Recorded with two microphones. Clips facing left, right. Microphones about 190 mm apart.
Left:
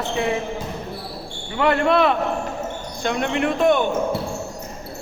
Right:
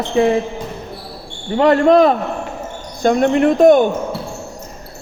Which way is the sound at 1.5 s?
40° right (ahead or behind).